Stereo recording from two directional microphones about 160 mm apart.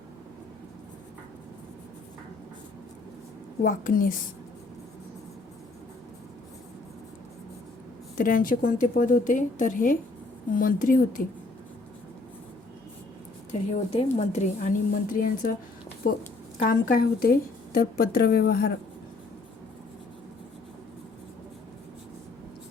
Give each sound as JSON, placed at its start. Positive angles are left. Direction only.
{"t": 3.6, "sound": "a woman's voice", "side_deg": 55}
{"t": 8.2, "sound": "a woman's voice", "side_deg": 60}
{"t": 13.5, "sound": "a woman's voice", "side_deg": 45}
{"t": 16.6, "sound": "a woman's voice", "side_deg": 65}